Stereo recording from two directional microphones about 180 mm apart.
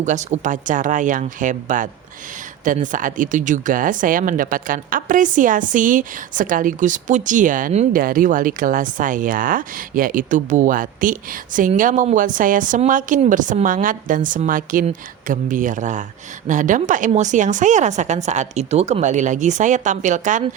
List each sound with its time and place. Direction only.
0.0 s speech: 40° right (ahead or behind)